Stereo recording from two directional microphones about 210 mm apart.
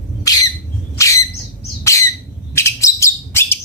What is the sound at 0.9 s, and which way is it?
Bird, 15° left (ahead or behind).